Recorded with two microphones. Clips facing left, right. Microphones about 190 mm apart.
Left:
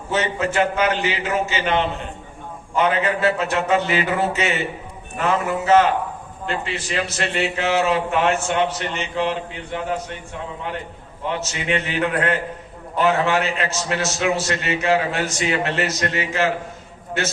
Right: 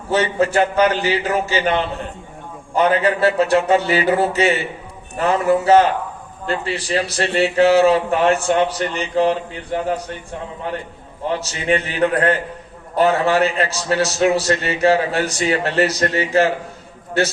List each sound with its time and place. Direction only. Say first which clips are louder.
0.1 s a man's voice: right 5 dB; 35° right (ahead or behind)
11.3 s a man's voice: right 4 dB; 35° right (ahead or behind)